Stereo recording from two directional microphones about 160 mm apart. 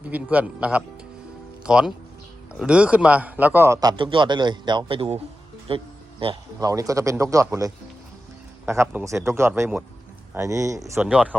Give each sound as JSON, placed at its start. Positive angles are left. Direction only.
{"t": 0.1, "sound": "a man's voice", "side_deg": -10}
{"t": 5.6, "sound": "music", "side_deg": -35}
{"t": 6.6, "sound": "a man's voice", "side_deg": -20}
{"t": 11.0, "sound": "speech", "side_deg": -5}